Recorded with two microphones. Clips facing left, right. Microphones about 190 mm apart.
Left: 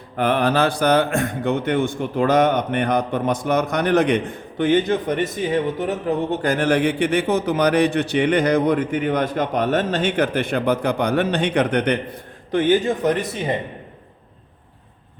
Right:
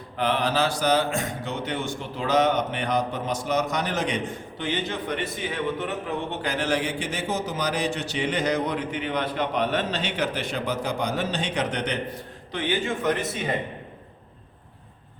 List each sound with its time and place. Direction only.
0.2 s a man's voice: 55° left (ahead or behind); by 13.1 s 35° left (ahead or behind)